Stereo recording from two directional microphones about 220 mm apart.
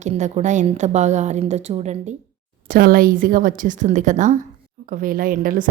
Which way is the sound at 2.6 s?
40° right (ahead or behind).